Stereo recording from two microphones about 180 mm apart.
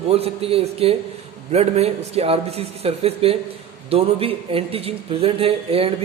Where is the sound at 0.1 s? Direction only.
35° right (ahead or behind).